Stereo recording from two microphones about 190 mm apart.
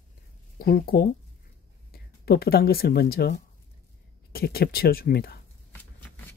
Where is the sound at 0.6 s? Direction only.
50° left (ahead or behind).